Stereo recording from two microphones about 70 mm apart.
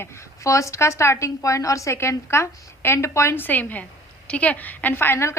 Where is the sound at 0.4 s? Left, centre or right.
Left.